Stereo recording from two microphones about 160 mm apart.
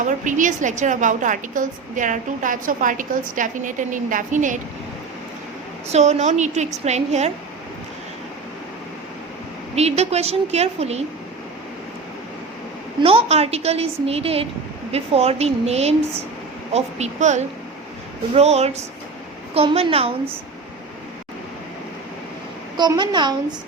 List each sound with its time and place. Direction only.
0.0 s a woman's voice: 55° right (ahead or behind)
5.9 s a woman's voice: 45° right (ahead or behind)
9.7 s a woman's voice: 40° right (ahead or behind)
13.0 s a woman's voice: 35° right (ahead or behind)
22.8 s a woman's voice: 25° right (ahead or behind)